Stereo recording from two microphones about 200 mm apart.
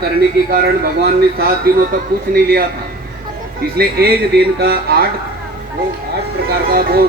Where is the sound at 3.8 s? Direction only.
50° right (ahead or behind).